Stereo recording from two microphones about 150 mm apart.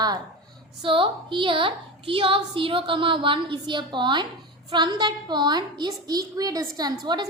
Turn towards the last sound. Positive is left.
turn(degrees=-25)  # may be behind; listen again after turning